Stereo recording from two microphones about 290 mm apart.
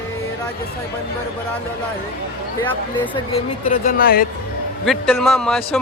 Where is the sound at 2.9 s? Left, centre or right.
Centre.